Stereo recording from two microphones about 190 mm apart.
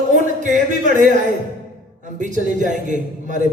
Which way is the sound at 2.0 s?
40° right (ahead or behind).